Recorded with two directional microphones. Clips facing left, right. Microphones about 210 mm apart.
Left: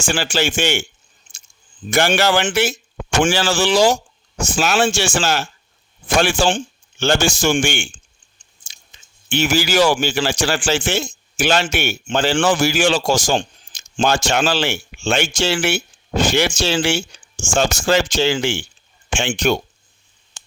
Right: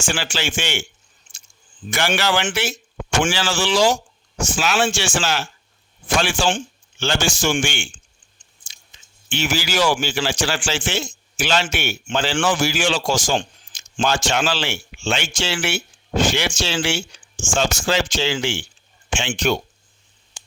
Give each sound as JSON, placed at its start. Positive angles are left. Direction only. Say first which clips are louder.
{"t": 0.0, "sound": "speech", "louder": "left 5 dB", "side_deg": 40}
{"t": 1.9, "sound": "speech", "louder": "left 5 dB", "side_deg": 45}
{"t": 9.3, "sound": "speech", "louder": "left 5 dB", "side_deg": 40}